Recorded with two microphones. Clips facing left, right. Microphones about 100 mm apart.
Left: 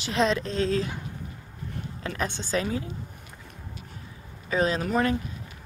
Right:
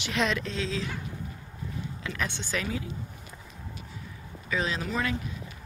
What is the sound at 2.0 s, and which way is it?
Speech, 40° left (ahead or behind).